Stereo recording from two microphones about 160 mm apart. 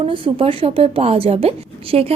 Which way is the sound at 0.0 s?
35° right (ahead or behind).